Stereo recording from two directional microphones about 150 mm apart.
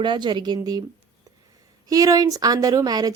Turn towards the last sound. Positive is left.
turn(degrees=-25)  # may be behind; listen again after turning